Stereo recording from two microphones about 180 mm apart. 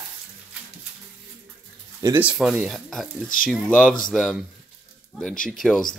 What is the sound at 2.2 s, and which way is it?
Speech, 5° right (ahead or behind).